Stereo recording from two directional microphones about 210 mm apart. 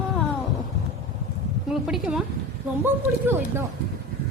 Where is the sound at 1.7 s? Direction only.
5° right (ahead or behind).